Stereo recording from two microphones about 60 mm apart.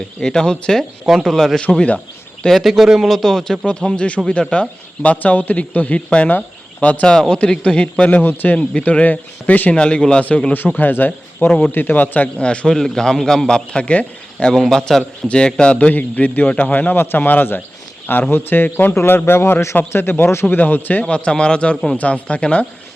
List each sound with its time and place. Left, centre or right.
0.2 s a man's voice: centre
3.7 s a man's voice: centre; by 8.5 s left
8.5 s a man's voice: left
12.4 s a man's voice: centre
12.7 s a man's voice: centre
14.5 s a man's voice: centre; by 21.0 s left
21.0 s a man's voice: centre